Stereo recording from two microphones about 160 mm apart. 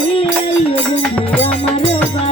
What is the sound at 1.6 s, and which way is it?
Music, 5° left (ahead or behind).